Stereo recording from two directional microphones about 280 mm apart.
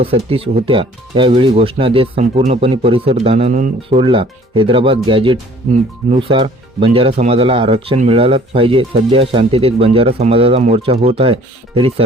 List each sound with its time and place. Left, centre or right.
0.0 s speech: centre